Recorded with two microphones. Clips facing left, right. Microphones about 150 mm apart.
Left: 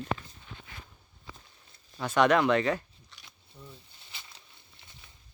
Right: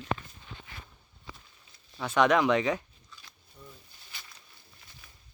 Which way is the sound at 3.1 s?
75° left (ahead or behind).